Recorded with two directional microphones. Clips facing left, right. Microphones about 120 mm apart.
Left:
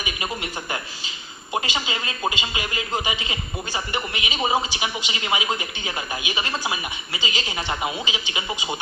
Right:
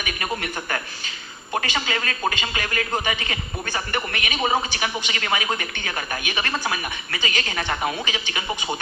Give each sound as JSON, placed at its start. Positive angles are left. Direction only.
{"t": 0.0, "sound": "a man's voice", "side_deg": 15}